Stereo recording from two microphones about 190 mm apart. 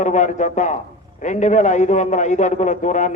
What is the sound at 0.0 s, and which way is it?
A man's voice, 40° left (ahead or behind).